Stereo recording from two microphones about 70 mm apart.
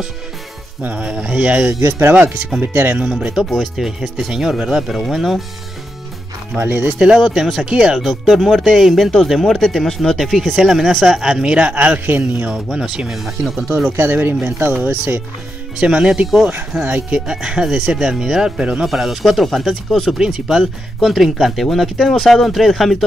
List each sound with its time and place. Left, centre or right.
0.8 s speech: centre
1.7 s speech: right
2.1 s speech: right
3.0 s speech: centre
3.4 s speech: centre
6.6 s speech: right
7.2 s speech: centre; by 12.5 s right
12.7 s speech: centre
13.9 s speech: right
17.3 s speech: centre
18.9 s speech: centre